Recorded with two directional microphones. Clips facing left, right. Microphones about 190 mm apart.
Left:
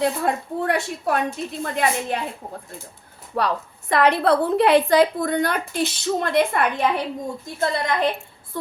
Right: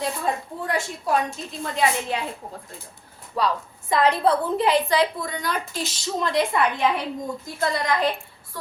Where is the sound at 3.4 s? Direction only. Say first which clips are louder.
Left 1 dB; 60° left (ahead or behind).